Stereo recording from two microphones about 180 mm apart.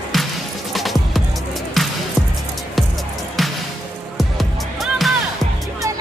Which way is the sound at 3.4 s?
Centre (ahead or behind).